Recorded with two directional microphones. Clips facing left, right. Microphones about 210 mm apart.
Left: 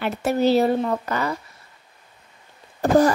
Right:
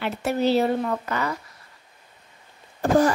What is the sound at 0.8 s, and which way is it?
Speech, 30° left (ahead or behind).